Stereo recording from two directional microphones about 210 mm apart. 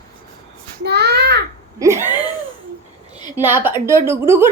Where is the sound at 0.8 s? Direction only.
50° right (ahead or behind).